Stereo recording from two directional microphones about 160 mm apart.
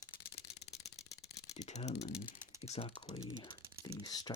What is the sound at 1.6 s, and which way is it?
Speech, 45° left (ahead or behind).